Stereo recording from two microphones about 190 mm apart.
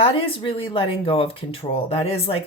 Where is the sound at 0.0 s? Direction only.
30° left (ahead or behind).